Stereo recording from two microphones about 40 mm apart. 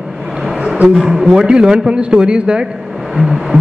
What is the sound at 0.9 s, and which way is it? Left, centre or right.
A man's voice, centre.